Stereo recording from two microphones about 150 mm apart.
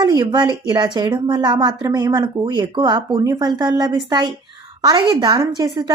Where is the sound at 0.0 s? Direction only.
25° right (ahead or behind).